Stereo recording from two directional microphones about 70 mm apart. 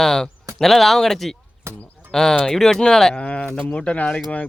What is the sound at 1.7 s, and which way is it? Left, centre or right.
Speech, right.